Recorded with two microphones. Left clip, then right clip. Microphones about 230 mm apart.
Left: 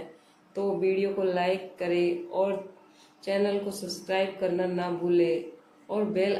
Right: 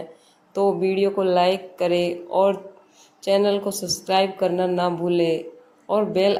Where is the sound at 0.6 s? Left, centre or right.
Right.